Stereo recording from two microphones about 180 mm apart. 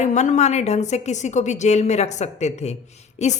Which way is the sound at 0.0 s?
40° left (ahead or behind).